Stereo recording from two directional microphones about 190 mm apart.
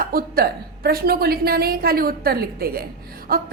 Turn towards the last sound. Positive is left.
turn(degrees=-50)  # may be behind; listen again after turning